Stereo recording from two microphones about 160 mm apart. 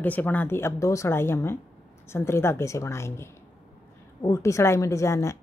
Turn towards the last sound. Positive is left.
turn(degrees=20)  # may be behind; listen again after turning